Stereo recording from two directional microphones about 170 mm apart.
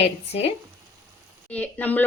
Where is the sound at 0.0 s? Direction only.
40° left (ahead or behind).